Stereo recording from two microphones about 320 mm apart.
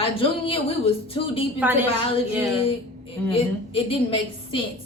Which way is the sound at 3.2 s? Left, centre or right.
Centre.